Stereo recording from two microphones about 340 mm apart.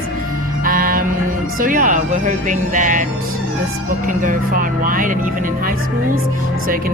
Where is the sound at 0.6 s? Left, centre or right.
Right.